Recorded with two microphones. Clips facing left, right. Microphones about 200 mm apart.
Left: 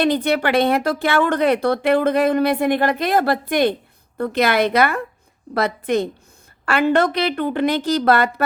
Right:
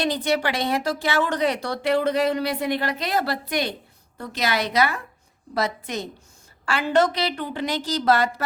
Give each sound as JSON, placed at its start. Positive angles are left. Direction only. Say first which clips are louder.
{"t": 0.0, "sound": "a woman's voice", "louder": "left 5 dB", "side_deg": 55}